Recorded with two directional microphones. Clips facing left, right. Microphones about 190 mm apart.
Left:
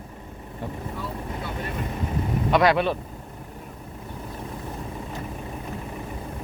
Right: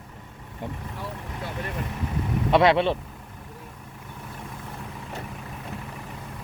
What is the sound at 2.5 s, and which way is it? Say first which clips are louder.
Speech: right 1 dB; 25° right (ahead or behind).